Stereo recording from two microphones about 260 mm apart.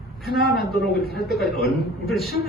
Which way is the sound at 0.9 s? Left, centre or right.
Left.